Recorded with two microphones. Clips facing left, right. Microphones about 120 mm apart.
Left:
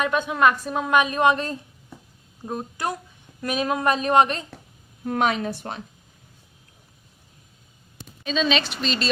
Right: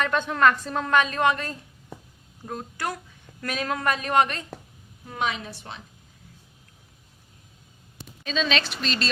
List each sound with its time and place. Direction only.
0.0 s a woman's voice: 10° left (ahead or behind)
5.0 s speech: 55° left (ahead or behind)
8.2 s speech: 5° left (ahead or behind)